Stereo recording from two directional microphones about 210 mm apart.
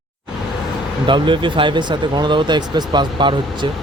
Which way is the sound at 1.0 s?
25° right (ahead or behind).